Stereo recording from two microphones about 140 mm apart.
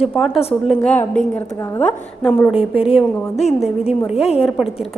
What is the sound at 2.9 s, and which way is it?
A woman's voice, 50° left (ahead or behind).